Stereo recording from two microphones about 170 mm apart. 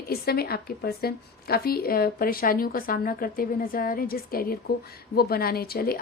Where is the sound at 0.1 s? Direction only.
65° left (ahead or behind).